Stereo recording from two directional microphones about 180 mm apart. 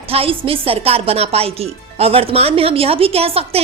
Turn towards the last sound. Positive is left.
turn(degrees=-35)  # may be behind; listen again after turning